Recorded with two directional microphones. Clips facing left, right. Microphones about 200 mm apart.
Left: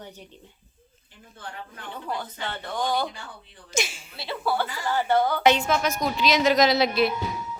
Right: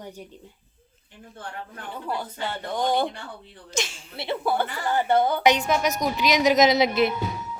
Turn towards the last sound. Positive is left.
turn(degrees=-20)  # may be behind; listen again after turning